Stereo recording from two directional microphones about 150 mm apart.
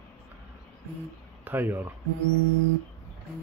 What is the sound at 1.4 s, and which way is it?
Speech, 15° right (ahead or behind).